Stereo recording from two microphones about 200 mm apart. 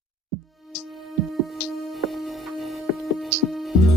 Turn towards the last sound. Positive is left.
turn(degrees=0)  # may be behind; listen again after turning